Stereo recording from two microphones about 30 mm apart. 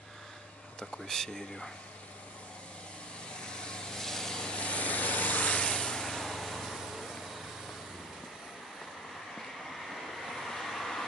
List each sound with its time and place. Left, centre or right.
0.9 s speech: centre
3.3 s vehicle: left
4.0 s wood: centre
4.6 s vehicle: left
5.5 s a sound: left
6.0 s vehicle: centre
9.8 s vehicle: centre